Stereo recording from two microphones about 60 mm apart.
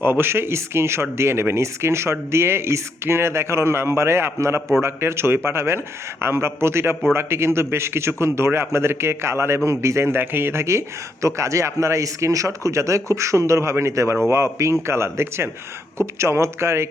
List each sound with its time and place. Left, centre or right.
0.0 s a man's voice: right